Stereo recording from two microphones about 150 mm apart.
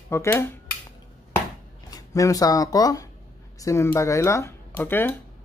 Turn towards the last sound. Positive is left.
turn(degrees=15)  # may be behind; listen again after turning